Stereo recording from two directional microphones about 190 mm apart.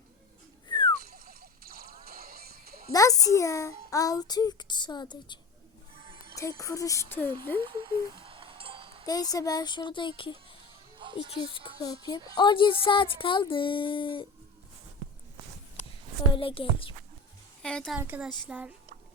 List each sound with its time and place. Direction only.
0.7 s a sound: 25° left (ahead or behind)
1.1 s music: 50° right (ahead or behind)
2.9 s a child's voice: 20° left (ahead or behind)
6.0 s music: 30° right (ahead or behind)
6.3 s speech: 15° left (ahead or behind)
7.6 s a sound: 25° right (ahead or behind)
9.0 s a child's voice: 20° left (ahead or behind)
10.9 s music: 25° right (ahead or behind)
12.3 s a child's voice: 25° left (ahead or behind)
15.8 s a woman's voice: 30° left (ahead or behind)
17.6 s a woman's voice: 5° left (ahead or behind)
17.9 s speech: 10° right (ahead or behind)